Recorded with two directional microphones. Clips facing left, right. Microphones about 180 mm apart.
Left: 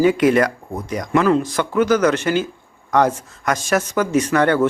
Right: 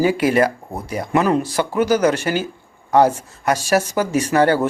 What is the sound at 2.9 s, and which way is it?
Speech, 30° right (ahead or behind).